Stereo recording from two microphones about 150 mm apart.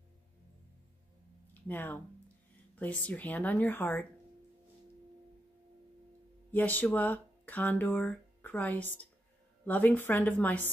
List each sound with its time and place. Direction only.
1.5 s a sound: 10° left (ahead or behind)
2.7 s speech: 10° left (ahead or behind)
6.5 s speech: 10° left (ahead or behind)